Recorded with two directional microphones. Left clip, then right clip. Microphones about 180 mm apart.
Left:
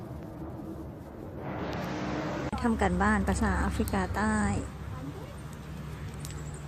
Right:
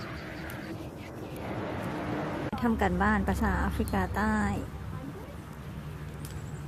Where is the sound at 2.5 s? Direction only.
Centre (ahead or behind).